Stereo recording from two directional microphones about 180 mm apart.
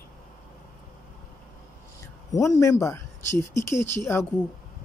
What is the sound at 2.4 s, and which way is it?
Speech, 15° left (ahead or behind).